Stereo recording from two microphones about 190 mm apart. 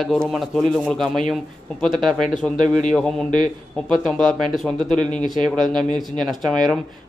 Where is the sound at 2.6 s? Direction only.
40° left (ahead or behind).